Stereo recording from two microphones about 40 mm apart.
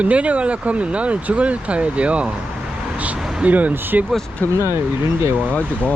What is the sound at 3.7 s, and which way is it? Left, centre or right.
Speech, right.